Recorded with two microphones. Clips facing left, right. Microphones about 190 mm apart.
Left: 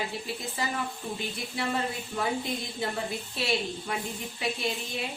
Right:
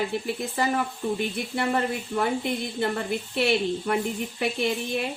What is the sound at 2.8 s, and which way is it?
Speech, 60° right (ahead or behind).